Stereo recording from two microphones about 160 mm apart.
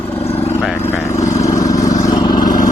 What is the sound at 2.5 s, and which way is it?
Vehicle, 55° left (ahead or behind).